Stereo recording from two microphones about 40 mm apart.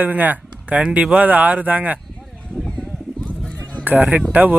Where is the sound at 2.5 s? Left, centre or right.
Centre.